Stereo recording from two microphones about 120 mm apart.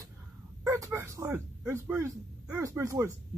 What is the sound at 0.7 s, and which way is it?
Speech, 25° right (ahead or behind).